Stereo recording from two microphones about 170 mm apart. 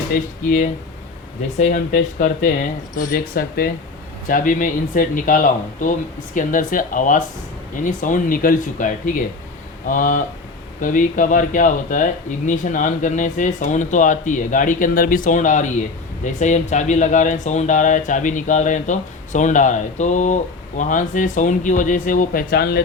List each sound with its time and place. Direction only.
0.1 s speech: 50° left (ahead or behind)